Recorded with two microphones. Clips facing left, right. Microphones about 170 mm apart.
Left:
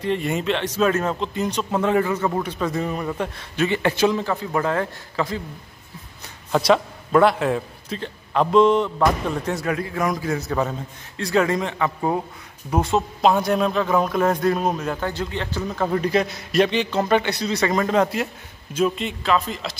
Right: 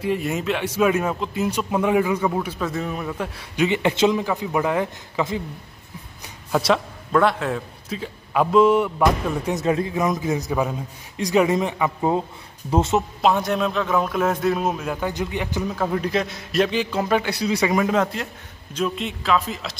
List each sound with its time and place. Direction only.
0.0 s a man's voice: 5° right (ahead or behind)
3.5 s a man's voice: 15° right (ahead or behind)
6.2 s a man's voice: 5° right (ahead or behind); by 13.0 s 25° right (ahead or behind)
13.2 s a man's voice: centre (ahead or behind)
18.0 s a man's voice: 5° left (ahead or behind)